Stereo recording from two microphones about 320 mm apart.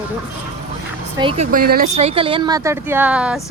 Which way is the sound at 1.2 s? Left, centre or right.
Centre.